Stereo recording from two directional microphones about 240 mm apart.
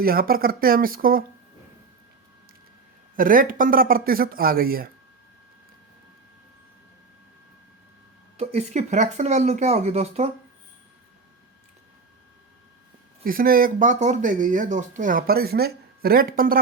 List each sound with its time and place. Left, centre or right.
0.0 s speech: right
3.2 s speech: right
8.4 s speech: right
13.2 s speech: right